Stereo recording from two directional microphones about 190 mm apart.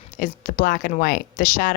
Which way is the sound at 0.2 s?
45° left (ahead or behind).